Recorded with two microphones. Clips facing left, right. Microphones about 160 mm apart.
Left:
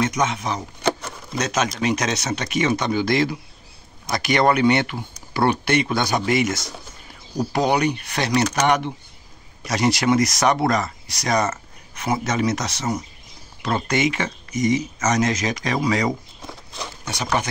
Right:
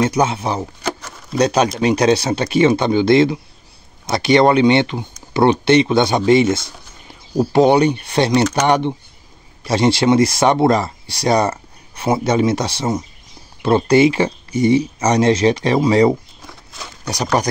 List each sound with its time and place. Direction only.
0.0 s speech: 30° right (ahead or behind)